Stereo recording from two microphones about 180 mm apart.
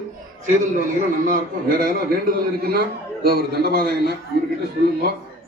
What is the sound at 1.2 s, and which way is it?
A man's voice, 50° right (ahead or behind).